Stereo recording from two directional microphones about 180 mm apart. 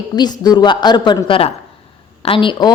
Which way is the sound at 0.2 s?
25° left (ahead or behind).